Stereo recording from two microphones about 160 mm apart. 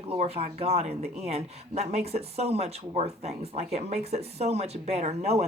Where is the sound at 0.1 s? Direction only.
40° right (ahead or behind).